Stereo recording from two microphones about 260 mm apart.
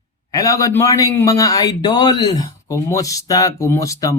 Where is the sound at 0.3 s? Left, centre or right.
Centre.